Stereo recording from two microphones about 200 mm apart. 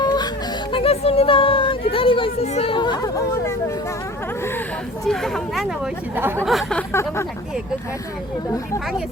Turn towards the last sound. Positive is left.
turn(degrees=15)  # may be behind; listen again after turning